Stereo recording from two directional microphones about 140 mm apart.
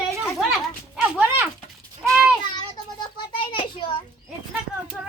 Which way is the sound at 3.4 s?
35° left (ahead or behind).